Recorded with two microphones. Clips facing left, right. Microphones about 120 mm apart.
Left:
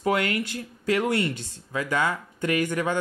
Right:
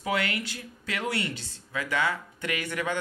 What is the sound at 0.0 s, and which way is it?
Speech, 45° left (ahead or behind).